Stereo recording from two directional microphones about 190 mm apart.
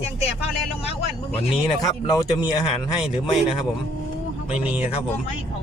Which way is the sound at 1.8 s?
20° left (ahead or behind).